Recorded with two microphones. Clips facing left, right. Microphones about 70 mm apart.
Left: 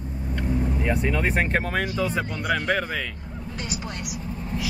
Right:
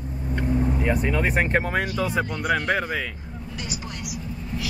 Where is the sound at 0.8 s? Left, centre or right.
Centre.